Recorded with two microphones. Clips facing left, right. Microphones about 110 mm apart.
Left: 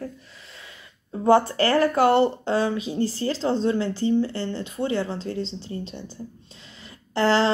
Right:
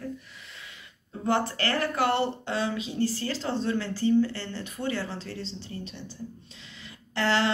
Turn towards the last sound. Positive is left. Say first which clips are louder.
# left 6 dB
turn(degrees=30)  # may be behind; listen again after turning